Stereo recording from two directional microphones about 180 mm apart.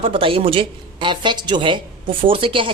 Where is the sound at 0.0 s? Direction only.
30° right (ahead or behind).